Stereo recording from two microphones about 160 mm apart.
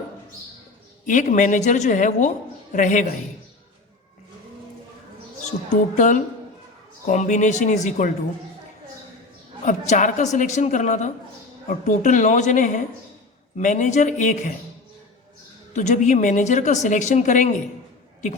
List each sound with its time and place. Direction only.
1.0 s a woman's voice: 50° left (ahead or behind)
5.5 s a woman's voice: 50° left (ahead or behind)
9.6 s a woman's voice: 50° left (ahead or behind)
15.7 s a woman's voice: 50° left (ahead or behind)